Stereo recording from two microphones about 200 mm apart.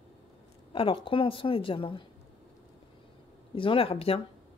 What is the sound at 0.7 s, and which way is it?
A woman's voice, 25° left (ahead or behind).